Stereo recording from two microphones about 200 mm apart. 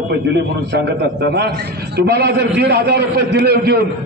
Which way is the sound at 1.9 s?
55° right (ahead or behind).